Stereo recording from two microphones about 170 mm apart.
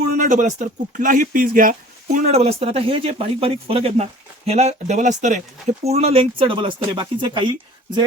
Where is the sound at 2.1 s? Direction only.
40° right (ahead or behind).